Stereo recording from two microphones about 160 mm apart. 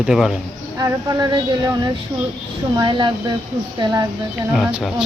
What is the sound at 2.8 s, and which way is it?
Speech, 30° right (ahead or behind).